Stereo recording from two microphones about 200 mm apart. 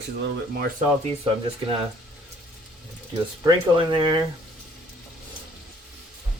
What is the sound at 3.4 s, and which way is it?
Speech, 20° right (ahead or behind).